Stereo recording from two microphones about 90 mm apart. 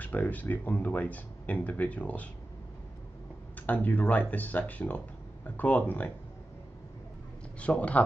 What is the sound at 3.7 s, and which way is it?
Speech, 20° left (ahead or behind).